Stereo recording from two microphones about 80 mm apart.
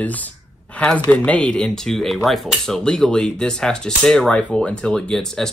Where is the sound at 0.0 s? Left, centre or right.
Centre.